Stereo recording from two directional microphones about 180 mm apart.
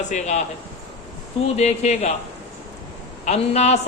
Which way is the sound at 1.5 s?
40° left (ahead or behind).